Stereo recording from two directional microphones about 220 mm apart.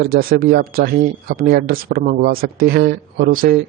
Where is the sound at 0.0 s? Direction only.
40° right (ahead or behind).